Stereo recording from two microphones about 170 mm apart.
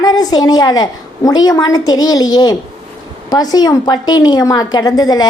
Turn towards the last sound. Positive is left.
turn(degrees=25)  # may be behind; listen again after turning